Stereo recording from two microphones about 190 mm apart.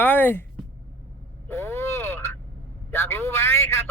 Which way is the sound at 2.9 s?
10° left (ahead or behind).